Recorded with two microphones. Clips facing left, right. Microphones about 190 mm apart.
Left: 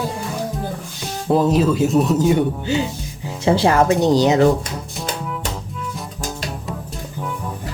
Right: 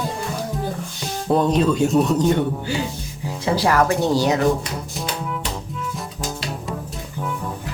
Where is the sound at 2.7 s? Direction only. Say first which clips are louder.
Left 4 dB; 20° left (ahead or behind).